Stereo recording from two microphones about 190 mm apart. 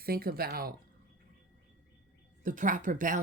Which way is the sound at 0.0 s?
50° right (ahead or behind).